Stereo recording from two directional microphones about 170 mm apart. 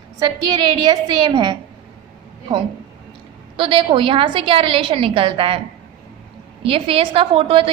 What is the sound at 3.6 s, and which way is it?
A woman's voice, 30° right (ahead or behind).